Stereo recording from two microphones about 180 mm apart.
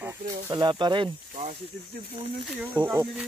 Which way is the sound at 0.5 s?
25° right (ahead or behind).